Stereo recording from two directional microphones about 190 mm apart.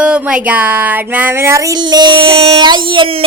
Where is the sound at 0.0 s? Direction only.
5° right (ahead or behind).